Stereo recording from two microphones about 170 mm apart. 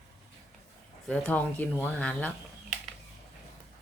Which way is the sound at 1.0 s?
5° left (ahead or behind).